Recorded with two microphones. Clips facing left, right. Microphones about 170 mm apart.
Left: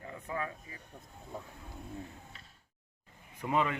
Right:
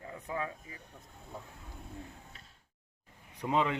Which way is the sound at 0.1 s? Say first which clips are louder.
Right 1 dB; 10° right (ahead or behind).